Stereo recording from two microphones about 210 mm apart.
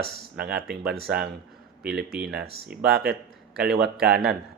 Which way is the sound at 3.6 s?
50° right (ahead or behind).